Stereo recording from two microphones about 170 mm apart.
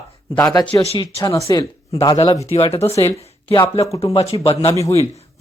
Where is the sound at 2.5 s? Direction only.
35° left (ahead or behind).